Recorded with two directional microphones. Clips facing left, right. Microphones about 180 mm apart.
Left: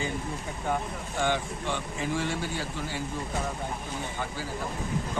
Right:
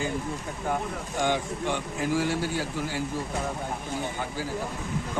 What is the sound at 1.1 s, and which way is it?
A man's voice, 15° right (ahead or behind).